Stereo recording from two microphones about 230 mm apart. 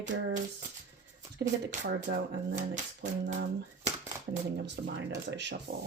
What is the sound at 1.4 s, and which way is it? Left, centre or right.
Speech, right.